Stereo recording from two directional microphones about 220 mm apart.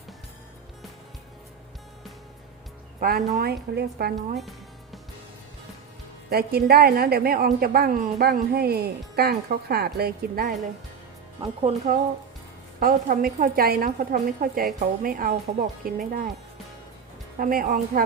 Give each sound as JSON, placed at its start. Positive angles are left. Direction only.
{"t": 3.0, "sound": "a woman's voice", "side_deg": -40}
{"t": 4.1, "sound": "speech", "side_deg": 0}
{"t": 6.3, "sound": "a woman's voice", "side_deg": -45}
{"t": 11.9, "sound": "a woman's voice", "side_deg": -35}
{"t": 17.3, "sound": "a woman's voice", "side_deg": -40}